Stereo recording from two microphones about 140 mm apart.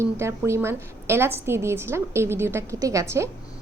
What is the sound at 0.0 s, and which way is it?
A woman's voice, 20° right (ahead or behind).